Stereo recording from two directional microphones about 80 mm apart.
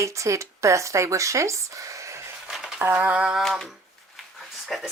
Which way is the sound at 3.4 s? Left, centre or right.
Centre.